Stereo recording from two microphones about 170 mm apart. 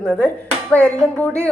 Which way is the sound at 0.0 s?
5° left (ahead or behind).